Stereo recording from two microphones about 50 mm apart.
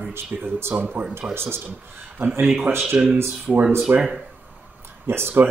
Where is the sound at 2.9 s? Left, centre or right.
Centre.